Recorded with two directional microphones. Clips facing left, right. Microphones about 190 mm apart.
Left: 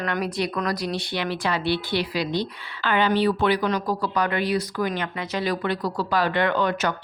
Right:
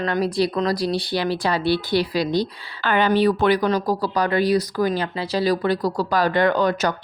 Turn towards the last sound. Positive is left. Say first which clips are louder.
# right 4 dB
turn(degrees=-40)  # may be behind; listen again after turning